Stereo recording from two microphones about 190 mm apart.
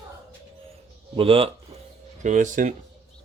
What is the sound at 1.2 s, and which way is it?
Speech, 30° right (ahead or behind).